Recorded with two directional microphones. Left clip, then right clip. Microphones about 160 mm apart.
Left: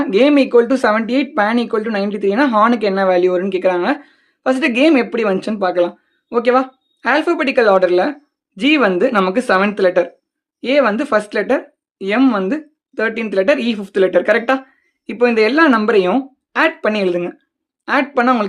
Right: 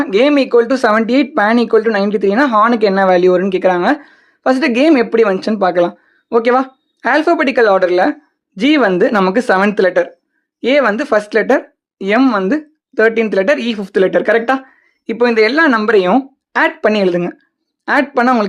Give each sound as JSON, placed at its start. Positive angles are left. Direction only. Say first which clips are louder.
{"t": 0.0, "sound": "speech", "louder": "right 1 dB", "side_deg": -40}